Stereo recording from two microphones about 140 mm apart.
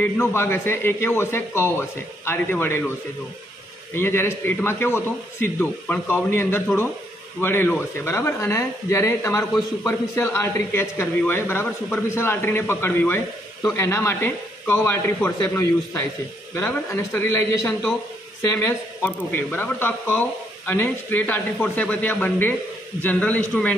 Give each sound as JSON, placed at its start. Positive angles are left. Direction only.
{"t": 0.0, "sound": "speech", "side_deg": 15}
{"t": 3.9, "sound": "speech", "side_deg": 15}